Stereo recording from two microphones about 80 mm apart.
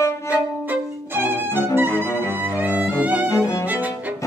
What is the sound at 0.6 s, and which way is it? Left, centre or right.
Violin, right.